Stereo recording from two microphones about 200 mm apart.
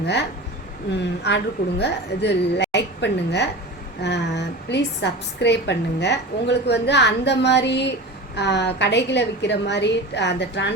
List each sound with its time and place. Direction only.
0.0 s speech: 60° left (ahead or behind)
1.3 s a woman's voice: 60° left (ahead or behind)